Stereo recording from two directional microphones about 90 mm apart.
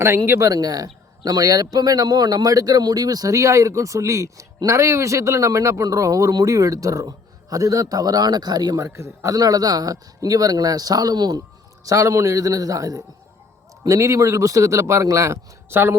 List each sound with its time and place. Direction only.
0.0 s a man's voice: 30° right (ahead or behind); by 8.8 s 45° right (ahead or behind)
8.8 s a man's voice: 30° right (ahead or behind); by 11.3 s 50° right (ahead or behind)
11.9 s a man's voice: 35° right (ahead or behind)